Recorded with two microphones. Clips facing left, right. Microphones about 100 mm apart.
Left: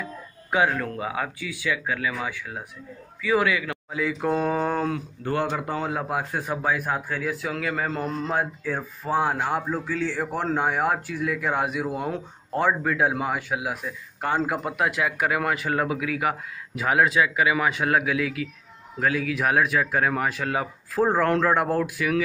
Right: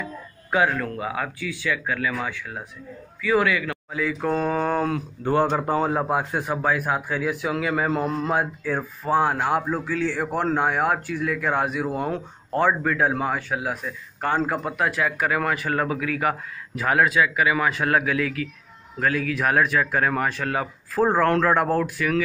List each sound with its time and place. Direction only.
0.5 s a man's voice: 15° left (ahead or behind)
4.5 s speech: 5° left (ahead or behind)
5.5 s a man's voice: 40° right (ahead or behind)
6.5 s a man's voice: centre (ahead or behind)
17.0 s a man's voice: 20° left (ahead or behind)